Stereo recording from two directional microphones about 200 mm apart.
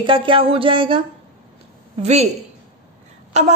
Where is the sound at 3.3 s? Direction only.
35° right (ahead or behind).